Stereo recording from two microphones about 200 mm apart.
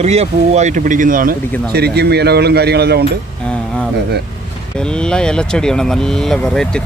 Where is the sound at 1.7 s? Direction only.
55° right (ahead or behind).